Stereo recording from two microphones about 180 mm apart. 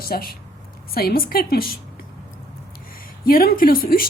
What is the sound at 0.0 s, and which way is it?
A woman's voice, 55° left (ahead or behind).